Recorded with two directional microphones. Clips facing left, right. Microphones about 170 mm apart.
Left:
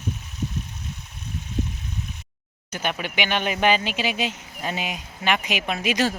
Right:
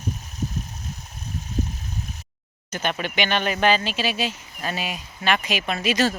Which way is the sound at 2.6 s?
10° left (ahead or behind).